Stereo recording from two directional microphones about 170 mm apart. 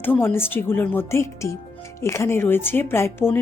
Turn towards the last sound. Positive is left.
turn(degrees=15)  # may be behind; listen again after turning